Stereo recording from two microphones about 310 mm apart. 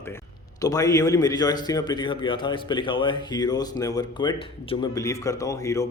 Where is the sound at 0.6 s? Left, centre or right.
Centre.